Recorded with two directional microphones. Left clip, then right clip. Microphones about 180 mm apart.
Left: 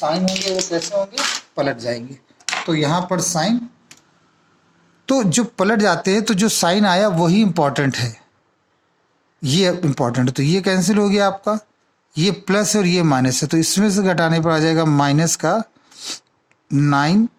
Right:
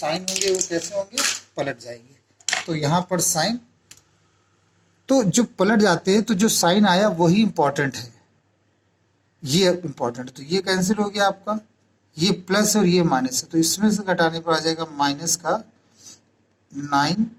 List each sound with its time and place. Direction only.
0.6 s speech: 40° left (ahead or behind)
1.5 s speech: 25° left (ahead or behind)
5.0 s a man's voice: 45° left (ahead or behind)
9.4 s a man's voice: 50° left (ahead or behind)
16.6 s a man's voice: 50° left (ahead or behind)